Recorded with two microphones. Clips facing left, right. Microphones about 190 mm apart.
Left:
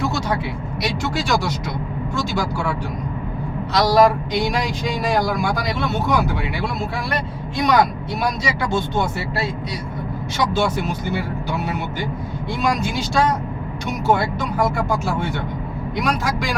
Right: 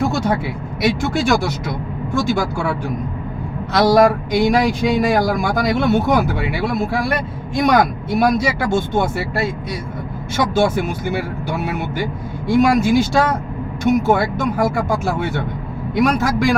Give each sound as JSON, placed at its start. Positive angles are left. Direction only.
{"t": 0.0, "sound": "vehicle", "side_deg": -55}
{"t": 0.8, "sound": "a man's voice", "side_deg": -50}
{"t": 3.7, "sound": "a man's voice", "side_deg": -55}
{"t": 12.5, "sound": "a man's voice", "side_deg": -50}